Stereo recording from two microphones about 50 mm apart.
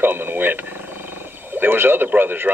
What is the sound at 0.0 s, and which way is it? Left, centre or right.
A man's voice, right.